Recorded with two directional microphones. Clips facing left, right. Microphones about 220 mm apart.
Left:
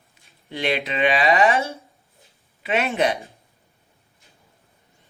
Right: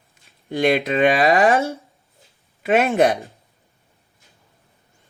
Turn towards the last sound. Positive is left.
turn(degrees=-45)  # may be behind; listen again after turning